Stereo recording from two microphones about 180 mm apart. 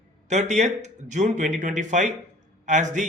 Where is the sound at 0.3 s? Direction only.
40° right (ahead or behind).